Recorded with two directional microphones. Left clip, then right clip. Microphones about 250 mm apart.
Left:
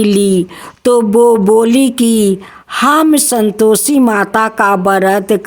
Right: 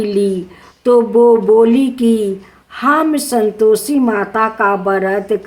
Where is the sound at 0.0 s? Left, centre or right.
Left.